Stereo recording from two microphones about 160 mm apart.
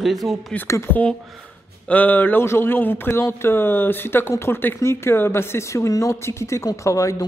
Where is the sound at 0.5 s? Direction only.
15° left (ahead or behind).